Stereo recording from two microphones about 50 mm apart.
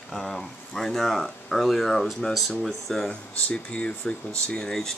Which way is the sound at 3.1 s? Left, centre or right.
Left.